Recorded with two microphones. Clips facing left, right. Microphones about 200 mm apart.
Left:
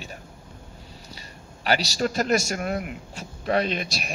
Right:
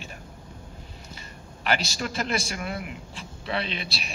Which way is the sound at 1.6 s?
40° left (ahead or behind).